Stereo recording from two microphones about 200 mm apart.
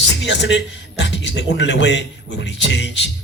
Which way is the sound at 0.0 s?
60° left (ahead or behind).